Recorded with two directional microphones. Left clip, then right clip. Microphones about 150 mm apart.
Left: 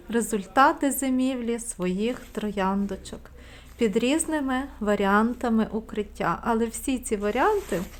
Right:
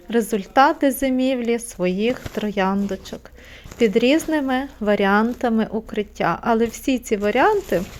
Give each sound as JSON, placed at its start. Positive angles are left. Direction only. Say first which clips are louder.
{"t": 0.1, "sound": "a woman's voice", "louder": "right 6 dB", "side_deg": -15}